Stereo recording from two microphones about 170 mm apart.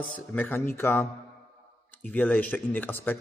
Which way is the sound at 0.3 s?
10° left (ahead or behind).